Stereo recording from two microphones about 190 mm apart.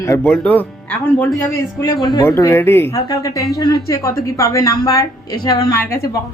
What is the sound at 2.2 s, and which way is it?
Speech, 15° left (ahead or behind).